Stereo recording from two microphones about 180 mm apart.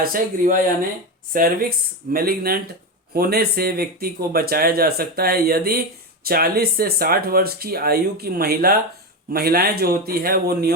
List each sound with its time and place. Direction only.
0.0 s speech: 50° right (ahead or behind)